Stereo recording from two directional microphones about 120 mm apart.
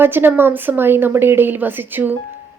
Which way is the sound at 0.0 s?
15° right (ahead or behind).